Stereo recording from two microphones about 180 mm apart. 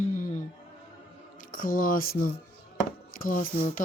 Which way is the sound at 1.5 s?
50° left (ahead or behind).